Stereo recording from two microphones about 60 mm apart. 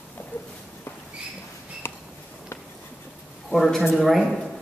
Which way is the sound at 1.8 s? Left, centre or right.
Left.